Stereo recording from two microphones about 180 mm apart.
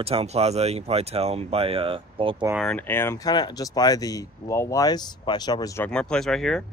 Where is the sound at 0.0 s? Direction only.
35° right (ahead or behind).